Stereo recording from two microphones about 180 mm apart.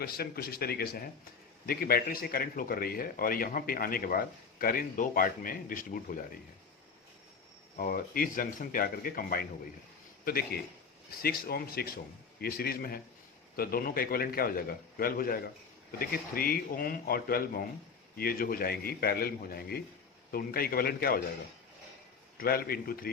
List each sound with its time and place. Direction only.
0.0 s a man's voice: 60° left (ahead or behind)
7.8 s a man's voice: 50° left (ahead or behind)
22.4 s a man's voice: 55° left (ahead or behind)